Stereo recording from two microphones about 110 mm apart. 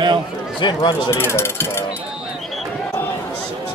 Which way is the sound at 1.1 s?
20° left (ahead or behind).